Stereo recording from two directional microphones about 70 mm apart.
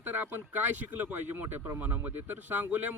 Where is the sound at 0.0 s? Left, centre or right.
Right.